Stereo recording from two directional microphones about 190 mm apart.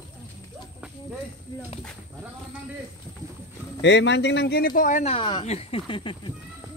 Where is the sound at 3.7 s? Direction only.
70° left (ahead or behind); by 5.1 s 40° left (ahead or behind).